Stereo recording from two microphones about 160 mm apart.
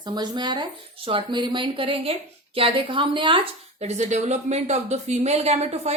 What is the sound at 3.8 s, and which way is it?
Speech, 45° right (ahead or behind).